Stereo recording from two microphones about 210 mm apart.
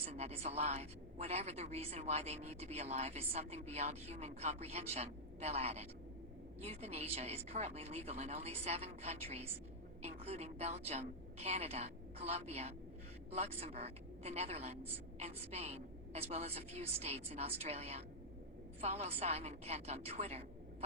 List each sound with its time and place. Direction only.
0.0 s a woman's voice: 30° right (ahead or behind)